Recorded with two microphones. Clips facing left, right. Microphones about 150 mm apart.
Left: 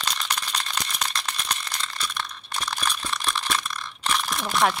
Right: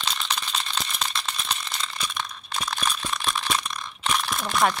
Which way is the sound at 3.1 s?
5° right (ahead or behind).